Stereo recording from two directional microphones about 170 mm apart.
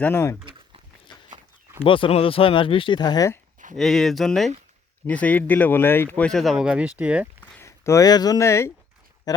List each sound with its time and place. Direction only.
0.0 s speech: 15° left (ahead or behind)
1.1 s walk: 25° left (ahead or behind)
1.8 s speech: 30° left (ahead or behind)
3.8 s speech: centre (ahead or behind)
7.6 s speech: 15° left (ahead or behind)